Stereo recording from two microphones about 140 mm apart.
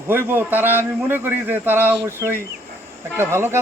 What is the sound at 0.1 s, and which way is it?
Speech, 15° right (ahead or behind).